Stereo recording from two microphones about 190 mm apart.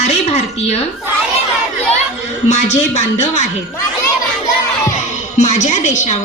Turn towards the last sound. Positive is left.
turn(degrees=40)  # may be behind; listen again after turning